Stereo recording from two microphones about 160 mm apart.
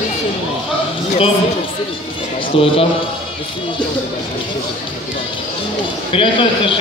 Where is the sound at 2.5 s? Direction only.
35° left (ahead or behind).